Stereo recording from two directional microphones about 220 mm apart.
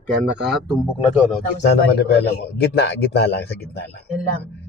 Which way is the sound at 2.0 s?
50° left (ahead or behind).